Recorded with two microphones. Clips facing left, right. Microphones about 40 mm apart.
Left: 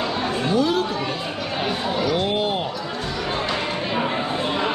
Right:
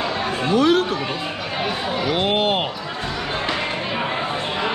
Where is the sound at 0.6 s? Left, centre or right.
Right.